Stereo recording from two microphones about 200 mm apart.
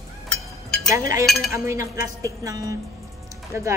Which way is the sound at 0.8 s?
15° right (ahead or behind).